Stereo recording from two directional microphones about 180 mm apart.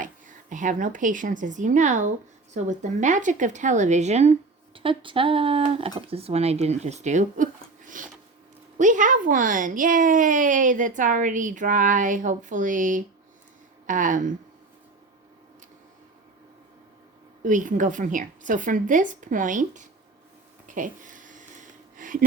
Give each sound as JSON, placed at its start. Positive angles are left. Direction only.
{"t": 0.0, "sound": "a woman's voice", "side_deg": -45}
{"t": 17.4, "sound": "a woman's voice", "side_deg": -45}
{"t": 20.7, "sound": "a sound", "side_deg": -45}